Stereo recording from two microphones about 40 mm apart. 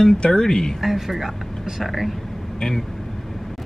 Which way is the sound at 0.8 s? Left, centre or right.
Centre.